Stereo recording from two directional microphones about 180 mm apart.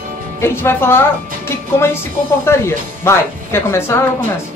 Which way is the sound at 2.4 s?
15° left (ahead or behind).